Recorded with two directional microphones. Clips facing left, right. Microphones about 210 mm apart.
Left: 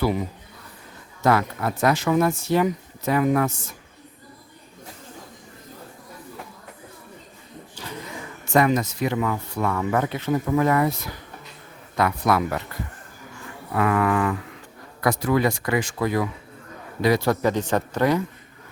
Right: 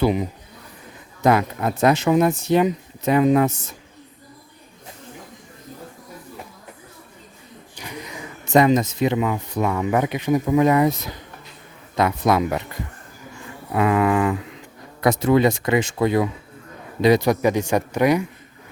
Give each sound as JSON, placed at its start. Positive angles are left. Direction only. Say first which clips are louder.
{"t": 0.0, "sound": "a man's voice", "louder": "right 4 dB", "side_deg": -20}
{"t": 7.8, "sound": "speech", "louder": "right 1 dB", "side_deg": -15}
{"t": 13.7, "sound": "a man's voice", "louder": "right 3 dB", "side_deg": -20}